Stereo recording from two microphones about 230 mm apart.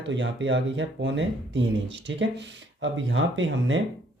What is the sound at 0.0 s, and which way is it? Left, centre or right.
Speech, right.